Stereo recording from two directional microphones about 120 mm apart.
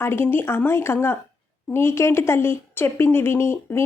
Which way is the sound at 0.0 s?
20° left (ahead or behind).